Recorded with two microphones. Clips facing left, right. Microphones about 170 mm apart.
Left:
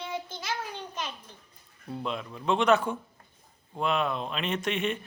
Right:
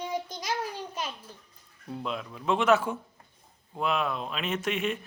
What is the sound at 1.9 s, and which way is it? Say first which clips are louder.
A man's voice: left 1 dB; centre (ahead or behind).